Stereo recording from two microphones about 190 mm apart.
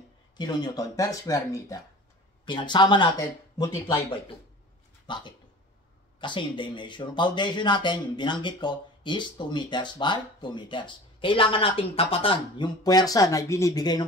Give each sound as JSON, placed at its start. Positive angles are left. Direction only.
{"t": 0.4, "sound": "speech", "side_deg": 20}
{"t": 5.0, "sound": "speech", "side_deg": 25}